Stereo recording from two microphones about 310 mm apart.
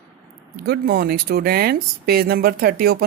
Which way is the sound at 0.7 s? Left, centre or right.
Right.